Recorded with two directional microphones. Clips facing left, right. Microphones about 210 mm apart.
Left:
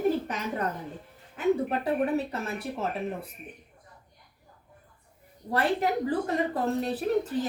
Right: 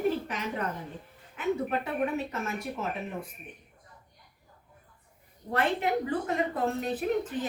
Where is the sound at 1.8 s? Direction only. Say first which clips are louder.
Left 4 dB; 35° left (ahead or behind).